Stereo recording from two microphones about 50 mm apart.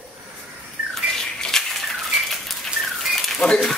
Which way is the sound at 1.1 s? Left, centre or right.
Centre.